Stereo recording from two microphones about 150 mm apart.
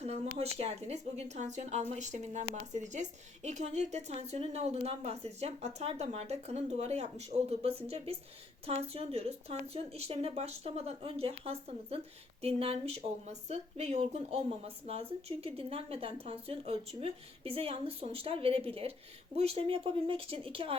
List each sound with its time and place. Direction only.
0.0 s a woman's voice: 45° right (ahead or behind)